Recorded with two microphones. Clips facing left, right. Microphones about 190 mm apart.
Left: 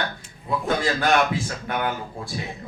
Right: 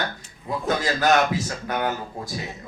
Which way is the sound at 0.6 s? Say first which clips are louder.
Right 2 dB; 40° right (ahead or behind).